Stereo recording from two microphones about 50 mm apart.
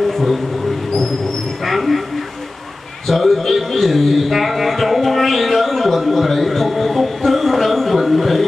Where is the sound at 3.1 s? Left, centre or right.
Centre.